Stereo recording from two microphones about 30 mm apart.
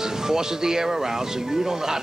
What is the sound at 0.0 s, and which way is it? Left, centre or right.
Speech, centre.